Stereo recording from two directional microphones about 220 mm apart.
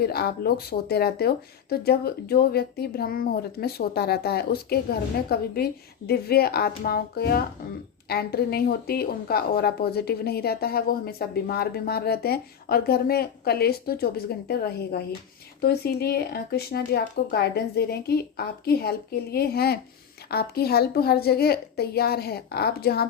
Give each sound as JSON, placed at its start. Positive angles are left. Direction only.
{"t": 0.0, "sound": "a woman's voice", "side_deg": 45}